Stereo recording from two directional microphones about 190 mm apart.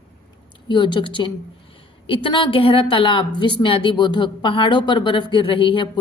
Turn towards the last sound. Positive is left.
turn(degrees=25)  # may be behind; listen again after turning